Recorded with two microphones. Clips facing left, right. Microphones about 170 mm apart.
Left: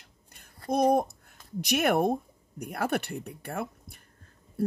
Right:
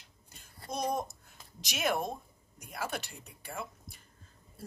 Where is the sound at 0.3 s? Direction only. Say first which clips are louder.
Left 11 dB; 55° left (ahead or behind).